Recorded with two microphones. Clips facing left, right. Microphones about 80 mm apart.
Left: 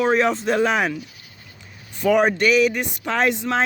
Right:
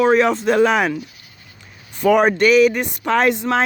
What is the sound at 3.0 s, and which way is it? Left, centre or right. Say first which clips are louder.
Speech: right 4 dB; right.